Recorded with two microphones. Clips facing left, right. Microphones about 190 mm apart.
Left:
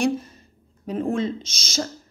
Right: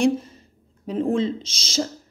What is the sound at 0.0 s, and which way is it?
A woman's voice, 25° right (ahead or behind).